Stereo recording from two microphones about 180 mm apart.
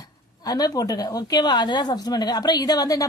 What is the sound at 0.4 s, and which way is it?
A woman's voice, 20° left (ahead or behind).